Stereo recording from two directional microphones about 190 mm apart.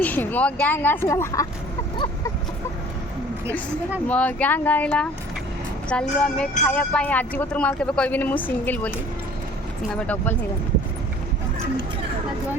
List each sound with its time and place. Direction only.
0.0 s speech: 10° left (ahead or behind)
4.1 s speech: 10° left (ahead or behind)
9.9 s speech: 5° left (ahead or behind)